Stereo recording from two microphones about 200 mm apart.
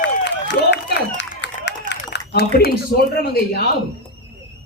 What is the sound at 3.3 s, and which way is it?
Speech, 50° left (ahead or behind).